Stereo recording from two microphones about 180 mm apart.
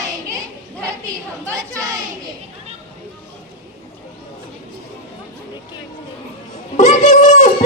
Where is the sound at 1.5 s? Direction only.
20° right (ahead or behind).